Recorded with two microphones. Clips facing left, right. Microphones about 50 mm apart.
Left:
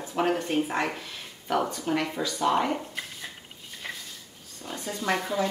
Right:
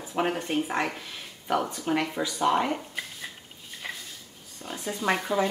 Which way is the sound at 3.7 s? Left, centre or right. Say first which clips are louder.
Right 1 dB; centre.